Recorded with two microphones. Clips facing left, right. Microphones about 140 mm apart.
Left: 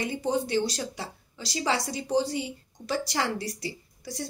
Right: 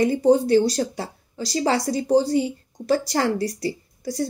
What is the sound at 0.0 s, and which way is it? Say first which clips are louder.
A woman's voice: right 11 dB; 40° right (ahead or behind).